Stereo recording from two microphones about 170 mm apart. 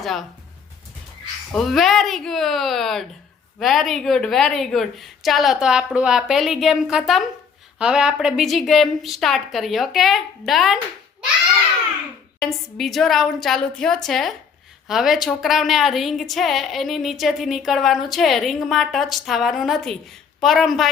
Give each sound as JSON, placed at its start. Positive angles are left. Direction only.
{"t": 0.0, "sound": "a woman's voice", "side_deg": 0}
{"t": 1.5, "sound": "a woman's voice", "side_deg": 0}
{"t": 12.4, "sound": "a woman's voice", "side_deg": 0}